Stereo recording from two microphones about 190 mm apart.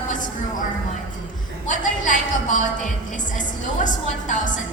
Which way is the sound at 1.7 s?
45° left (ahead or behind).